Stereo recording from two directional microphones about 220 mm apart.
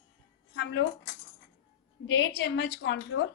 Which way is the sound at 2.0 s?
55° left (ahead or behind).